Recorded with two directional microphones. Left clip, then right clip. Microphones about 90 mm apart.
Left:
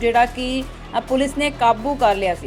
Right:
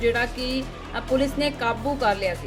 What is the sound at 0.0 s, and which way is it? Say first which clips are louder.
A woman's voice: left 6 dB; 40° left (ahead or behind).